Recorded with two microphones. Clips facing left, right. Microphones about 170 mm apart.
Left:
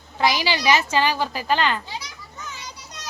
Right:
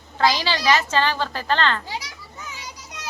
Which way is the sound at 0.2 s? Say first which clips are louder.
Right 1 dB; 15° left (ahead or behind).